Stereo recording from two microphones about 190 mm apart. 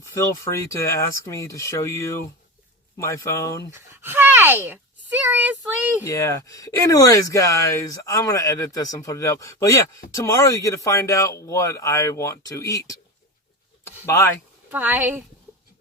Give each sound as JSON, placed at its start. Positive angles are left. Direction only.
{"t": 0.0, "sound": "speech", "side_deg": 15}
{"t": 3.7, "sound": "a child's voice", "side_deg": -10}
{"t": 6.1, "sound": "speech", "side_deg": 15}
{"t": 14.7, "sound": "speech", "side_deg": -10}